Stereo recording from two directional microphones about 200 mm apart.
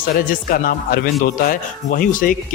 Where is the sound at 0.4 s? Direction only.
45° left (ahead or behind).